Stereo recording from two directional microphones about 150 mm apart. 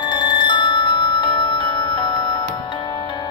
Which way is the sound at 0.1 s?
30° left (ahead or behind).